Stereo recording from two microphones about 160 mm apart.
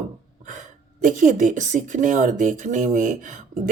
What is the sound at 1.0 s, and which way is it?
Speech, 50° right (ahead or behind).